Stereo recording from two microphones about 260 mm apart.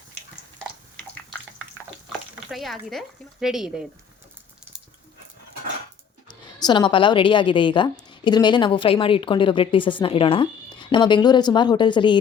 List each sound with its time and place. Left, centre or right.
2.5 s speech: centre
6.2 s a woman's voice: centre